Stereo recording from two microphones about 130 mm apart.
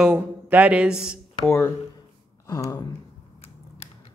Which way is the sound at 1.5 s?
20° left (ahead or behind).